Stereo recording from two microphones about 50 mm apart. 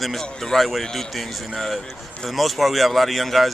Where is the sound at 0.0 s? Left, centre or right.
Centre.